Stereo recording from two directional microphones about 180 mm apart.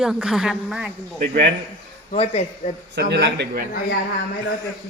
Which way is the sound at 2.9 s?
70° right (ahead or behind).